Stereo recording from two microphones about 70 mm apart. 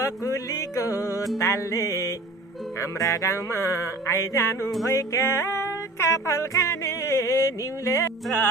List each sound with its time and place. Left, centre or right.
0.3 s music: left